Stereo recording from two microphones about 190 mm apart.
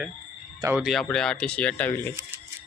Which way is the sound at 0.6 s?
10° right (ahead or behind).